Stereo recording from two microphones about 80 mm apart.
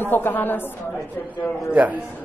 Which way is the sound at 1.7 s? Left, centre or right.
Centre.